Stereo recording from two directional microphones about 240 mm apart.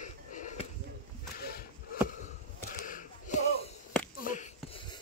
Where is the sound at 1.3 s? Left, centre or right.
Left.